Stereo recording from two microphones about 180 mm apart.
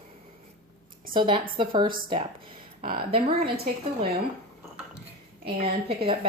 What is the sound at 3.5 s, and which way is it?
Speech, 60° right (ahead or behind).